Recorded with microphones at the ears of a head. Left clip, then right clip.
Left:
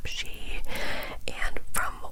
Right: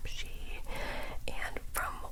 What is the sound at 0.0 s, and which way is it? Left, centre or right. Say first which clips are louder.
Whispering: left 9 dB; left.